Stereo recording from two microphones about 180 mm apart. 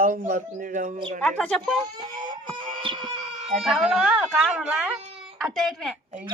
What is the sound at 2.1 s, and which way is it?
Baby cry, 25° right (ahead or behind).